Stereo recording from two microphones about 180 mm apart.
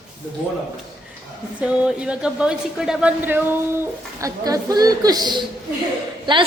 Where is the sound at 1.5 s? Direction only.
5° right (ahead or behind).